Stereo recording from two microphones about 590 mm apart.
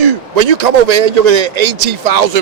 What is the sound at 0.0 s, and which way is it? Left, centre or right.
Speech, right.